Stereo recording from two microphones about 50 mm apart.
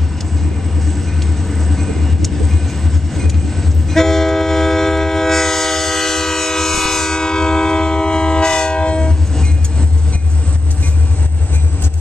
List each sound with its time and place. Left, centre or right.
0.8 s vehicle: centre
3.2 s train: centre